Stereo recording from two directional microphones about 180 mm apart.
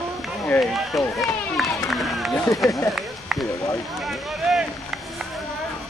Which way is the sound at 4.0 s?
Centre (ahead or behind).